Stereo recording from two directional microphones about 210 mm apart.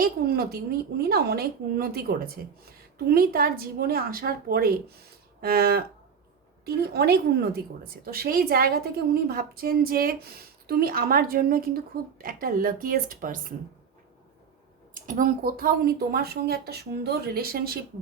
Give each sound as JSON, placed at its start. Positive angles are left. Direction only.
{"t": 0.0, "sound": "a woman's voice", "side_deg": -45}
{"t": 14.9, "sound": "a woman's voice", "side_deg": -40}